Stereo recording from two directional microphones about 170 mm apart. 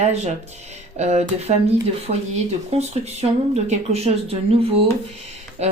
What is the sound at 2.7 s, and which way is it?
A woman's voice, 40° right (ahead or behind).